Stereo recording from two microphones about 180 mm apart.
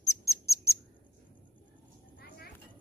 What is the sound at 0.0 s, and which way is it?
Bird, 15° left (ahead or behind).